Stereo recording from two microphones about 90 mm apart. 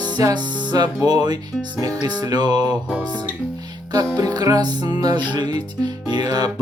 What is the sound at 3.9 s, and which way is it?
Music, 50° right (ahead or behind).